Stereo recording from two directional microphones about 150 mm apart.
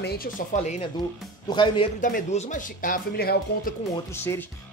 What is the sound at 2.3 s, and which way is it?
Speech, 60° left (ahead or behind).